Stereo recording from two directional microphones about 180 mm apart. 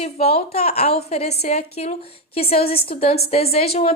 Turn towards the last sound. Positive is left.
turn(degrees=35)  # may be behind; listen again after turning